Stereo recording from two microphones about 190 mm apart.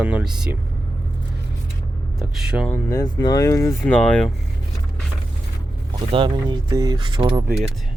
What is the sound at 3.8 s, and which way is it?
Speech, 5° left (ahead or behind).